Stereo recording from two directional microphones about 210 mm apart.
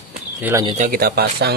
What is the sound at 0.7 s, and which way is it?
Speech, 40° right (ahead or behind).